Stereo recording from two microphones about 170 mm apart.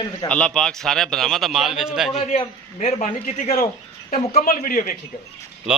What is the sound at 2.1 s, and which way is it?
A man's voice, 40° left (ahead or behind).